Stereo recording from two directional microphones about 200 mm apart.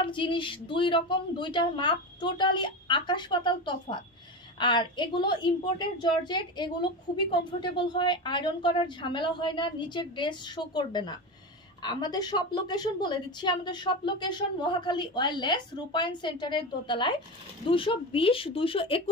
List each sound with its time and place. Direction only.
0.0 s a woman's voice: 25° left (ahead or behind)